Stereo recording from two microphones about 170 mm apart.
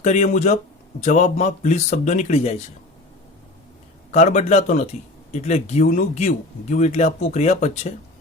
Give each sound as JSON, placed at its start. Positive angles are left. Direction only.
{"t": 0.0, "sound": "speech", "side_deg": 45}
{"t": 4.1, "sound": "speech", "side_deg": 45}